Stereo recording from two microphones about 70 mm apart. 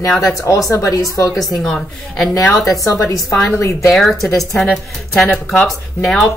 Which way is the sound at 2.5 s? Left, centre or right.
Left.